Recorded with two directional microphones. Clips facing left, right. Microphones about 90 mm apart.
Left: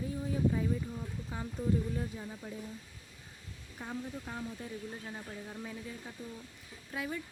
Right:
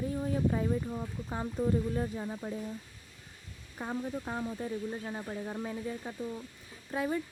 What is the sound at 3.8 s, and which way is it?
Speech, 45° right (ahead or behind).